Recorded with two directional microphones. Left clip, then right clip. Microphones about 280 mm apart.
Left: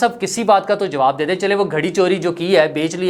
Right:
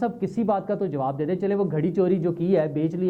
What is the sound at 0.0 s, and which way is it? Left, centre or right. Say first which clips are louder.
Speech: left 9 dB; centre.